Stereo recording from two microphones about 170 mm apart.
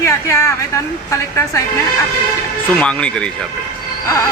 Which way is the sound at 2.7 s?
5° left (ahead or behind).